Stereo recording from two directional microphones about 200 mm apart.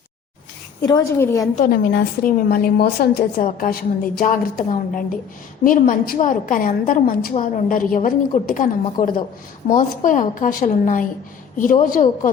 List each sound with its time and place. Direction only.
0.8 s a woman's voice: 20° left (ahead or behind)
1.5 s a woman's voice: 45° left (ahead or behind)